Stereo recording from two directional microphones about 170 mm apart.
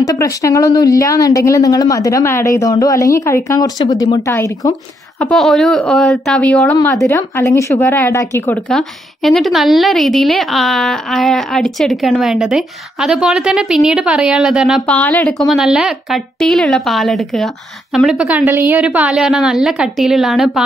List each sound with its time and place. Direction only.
0.0 s speech: 20° left (ahead or behind)
5.2 s a woman's voice: 5° left (ahead or behind)
7.1 s a woman's voice: 15° left (ahead or behind); by 15.0 s centre (ahead or behind)
15.0 s a woman's voice: 10° left (ahead or behind)